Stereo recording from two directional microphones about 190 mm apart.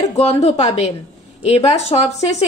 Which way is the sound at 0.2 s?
30° left (ahead or behind).